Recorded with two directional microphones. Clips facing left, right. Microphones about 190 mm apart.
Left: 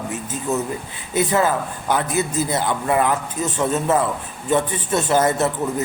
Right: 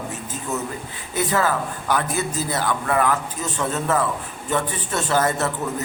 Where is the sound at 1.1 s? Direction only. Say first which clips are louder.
Left 3 dB; 20° left (ahead or behind).